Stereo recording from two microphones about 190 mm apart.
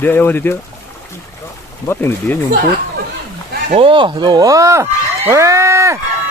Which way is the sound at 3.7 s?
25° right (ahead or behind).